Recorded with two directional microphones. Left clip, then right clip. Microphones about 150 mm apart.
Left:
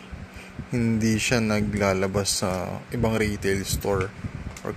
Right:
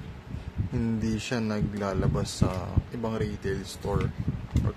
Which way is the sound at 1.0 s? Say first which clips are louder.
Left 7 dB; 15° left (ahead or behind).